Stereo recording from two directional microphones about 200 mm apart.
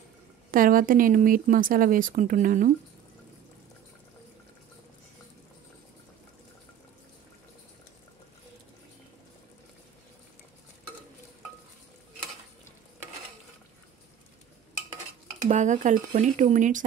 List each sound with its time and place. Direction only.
0.5 s speech: 45° right (ahead or behind)
15.4 s speech: 40° right (ahead or behind)